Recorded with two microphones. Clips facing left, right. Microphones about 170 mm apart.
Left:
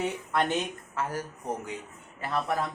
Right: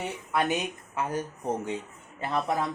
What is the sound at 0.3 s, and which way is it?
Speech, 10° right (ahead or behind).